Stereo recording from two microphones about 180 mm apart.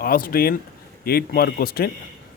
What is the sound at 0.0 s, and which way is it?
Speech, 55° left (ahead or behind).